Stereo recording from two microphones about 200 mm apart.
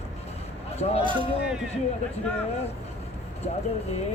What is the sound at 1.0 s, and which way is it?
Speech, 25° right (ahead or behind).